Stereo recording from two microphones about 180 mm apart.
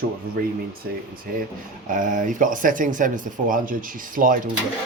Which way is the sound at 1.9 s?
45° right (ahead or behind).